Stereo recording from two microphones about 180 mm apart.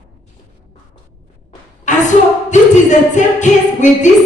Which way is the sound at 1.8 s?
45° left (ahead or behind).